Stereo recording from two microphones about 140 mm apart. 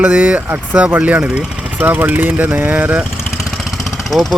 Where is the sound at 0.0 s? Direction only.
10° right (ahead or behind).